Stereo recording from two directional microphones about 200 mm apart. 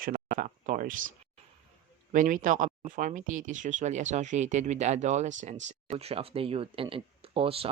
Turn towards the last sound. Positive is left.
turn(degrees=-25)  # may be behind; listen again after turning